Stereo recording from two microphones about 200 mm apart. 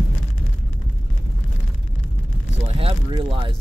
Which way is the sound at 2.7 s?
25° right (ahead or behind).